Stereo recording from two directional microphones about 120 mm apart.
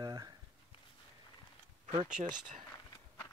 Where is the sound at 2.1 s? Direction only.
90° right.